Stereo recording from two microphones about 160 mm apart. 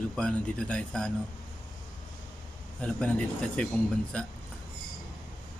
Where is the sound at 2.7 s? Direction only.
5° left (ahead or behind).